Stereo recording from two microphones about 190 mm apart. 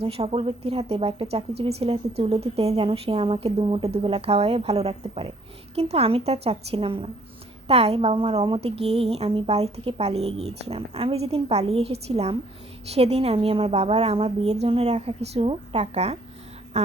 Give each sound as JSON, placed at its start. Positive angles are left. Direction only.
{"t": 0.0, "sound": "a woman's voice", "side_deg": -30}